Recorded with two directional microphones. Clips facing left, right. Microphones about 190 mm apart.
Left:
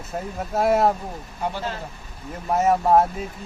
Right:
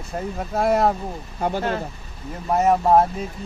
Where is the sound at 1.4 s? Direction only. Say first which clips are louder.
Right 5 dB; 55° right (ahead or behind).